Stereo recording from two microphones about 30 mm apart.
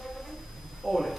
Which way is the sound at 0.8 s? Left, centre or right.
Centre.